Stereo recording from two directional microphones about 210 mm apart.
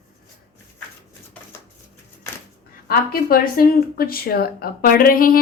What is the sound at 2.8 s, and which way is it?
A woman's voice, 45° left (ahead or behind).